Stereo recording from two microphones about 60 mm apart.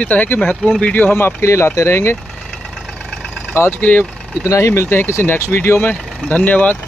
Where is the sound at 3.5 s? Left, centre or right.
Left.